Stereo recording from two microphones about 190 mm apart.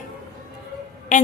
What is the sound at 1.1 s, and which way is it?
Speech, 40° left (ahead or behind).